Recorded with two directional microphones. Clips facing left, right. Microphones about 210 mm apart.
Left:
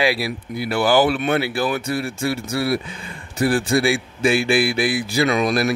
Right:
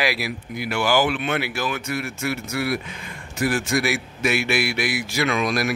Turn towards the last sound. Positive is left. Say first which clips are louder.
# left 4 dB
turn(degrees=30)  # may be behind; listen again after turning